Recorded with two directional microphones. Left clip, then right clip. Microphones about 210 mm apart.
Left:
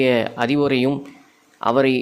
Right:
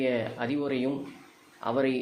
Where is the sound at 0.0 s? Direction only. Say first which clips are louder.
Left 11 dB; 45° left (ahead or behind).